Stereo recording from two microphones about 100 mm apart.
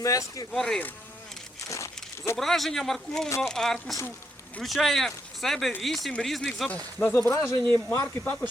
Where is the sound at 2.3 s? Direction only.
Centre (ahead or behind).